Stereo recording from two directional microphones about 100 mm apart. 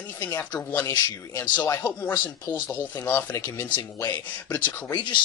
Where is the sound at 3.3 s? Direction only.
30° left (ahead or behind).